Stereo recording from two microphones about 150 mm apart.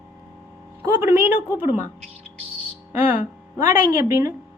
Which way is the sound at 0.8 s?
15° right (ahead or behind).